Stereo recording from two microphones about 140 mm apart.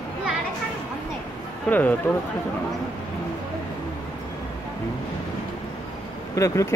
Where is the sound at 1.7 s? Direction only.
10° left (ahead or behind).